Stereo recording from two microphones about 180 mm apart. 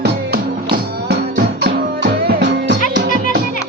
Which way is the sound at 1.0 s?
65° right (ahead or behind).